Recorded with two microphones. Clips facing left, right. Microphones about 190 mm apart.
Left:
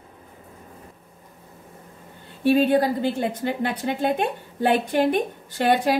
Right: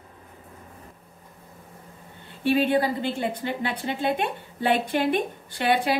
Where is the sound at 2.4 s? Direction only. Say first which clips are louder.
Left 3 dB; 40° left (ahead or behind).